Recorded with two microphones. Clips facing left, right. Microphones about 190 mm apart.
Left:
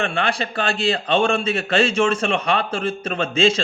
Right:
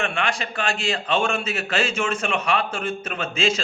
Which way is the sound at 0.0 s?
35° left (ahead or behind).